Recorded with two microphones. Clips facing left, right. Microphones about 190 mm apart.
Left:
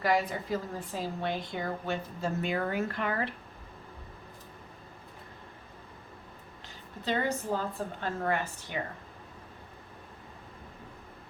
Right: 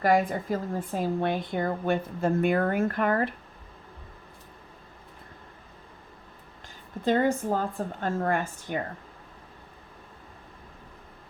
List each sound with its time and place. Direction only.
0.0 s speech: 50° right (ahead or behind)
7.0 s speech: 50° right (ahead or behind)